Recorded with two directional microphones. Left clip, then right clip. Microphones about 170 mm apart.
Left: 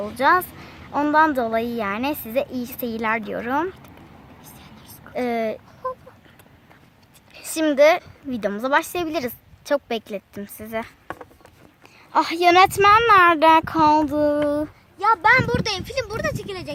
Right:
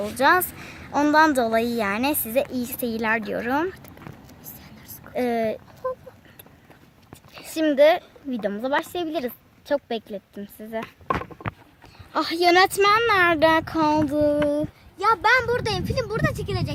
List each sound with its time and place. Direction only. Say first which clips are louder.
0.0 s a woman's voice: left 1 dB; 5° right (ahead or behind)
4.6 s whispering: left 1 dB; 20° right (ahead or behind)
5.1 s a woman's voice: even; centre (ahead or behind)
5.8 s a sound: even; 20° right (ahead or behind)
7.5 s speech: left 1 dB; 5° left (ahead or behind)
9.2 s a woman's voice: left 2 dB; 10° left (ahead or behind)
12.1 s speech: left 3 dB; 5° left (ahead or behind)
14.9 s speech: left 2 dB; 60° right (ahead or behind)